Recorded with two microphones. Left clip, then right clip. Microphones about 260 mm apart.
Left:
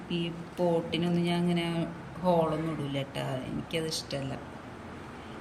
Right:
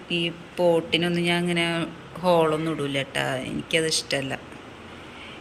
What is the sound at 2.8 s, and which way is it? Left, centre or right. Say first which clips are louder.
Speech: right 9 dB; centre.